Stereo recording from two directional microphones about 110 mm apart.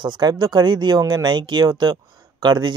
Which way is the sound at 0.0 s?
40° right (ahead or behind).